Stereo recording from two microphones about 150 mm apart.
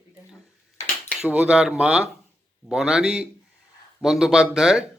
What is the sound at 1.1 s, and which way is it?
Speech, 10° right (ahead or behind).